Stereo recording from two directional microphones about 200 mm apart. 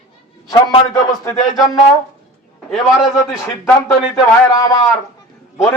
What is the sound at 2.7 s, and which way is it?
Speech, 5° right (ahead or behind).